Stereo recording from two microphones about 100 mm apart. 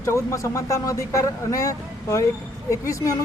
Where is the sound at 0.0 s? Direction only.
30° left (ahead or behind).